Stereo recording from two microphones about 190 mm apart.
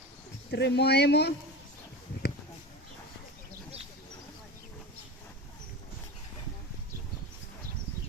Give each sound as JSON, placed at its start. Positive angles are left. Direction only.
{"t": 0.5, "sound": "speech", "side_deg": 60}